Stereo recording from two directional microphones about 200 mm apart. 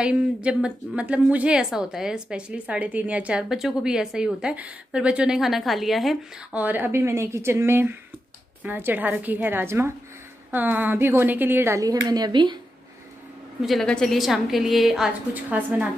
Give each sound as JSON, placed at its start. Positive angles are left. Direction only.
{"t": 0.0, "sound": "a woman's voice", "side_deg": -5}
{"t": 13.6, "sound": "a woman's voice", "side_deg": 0}